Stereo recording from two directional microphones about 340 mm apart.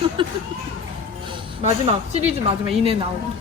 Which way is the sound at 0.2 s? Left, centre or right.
Centre.